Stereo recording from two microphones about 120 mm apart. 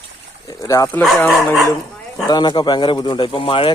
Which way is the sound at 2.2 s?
35° left (ahead or behind).